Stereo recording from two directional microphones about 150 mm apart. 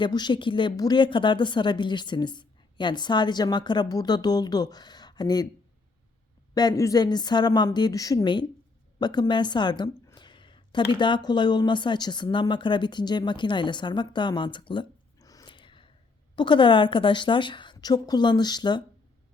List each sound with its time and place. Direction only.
0.0 s a woman's voice: 30° left (ahead or behind)
6.5 s a woman's voice: 25° left (ahead or behind)